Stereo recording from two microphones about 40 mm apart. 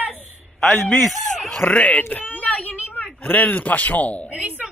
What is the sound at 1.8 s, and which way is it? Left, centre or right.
A woman's voice, left.